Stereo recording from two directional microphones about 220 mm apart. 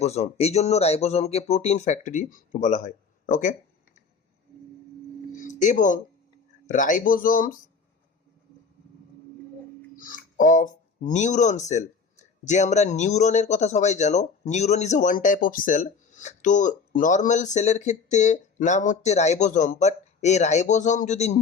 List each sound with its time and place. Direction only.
0.0 s speech: 30° left (ahead or behind)
5.4 s music: 35° left (ahead or behind)
6.7 s speech: 35° left (ahead or behind)
9.9 s speech: 35° left (ahead or behind)